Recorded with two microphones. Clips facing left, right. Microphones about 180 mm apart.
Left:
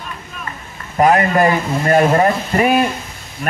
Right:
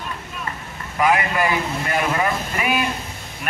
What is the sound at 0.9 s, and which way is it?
Speech, 45° left (ahead or behind).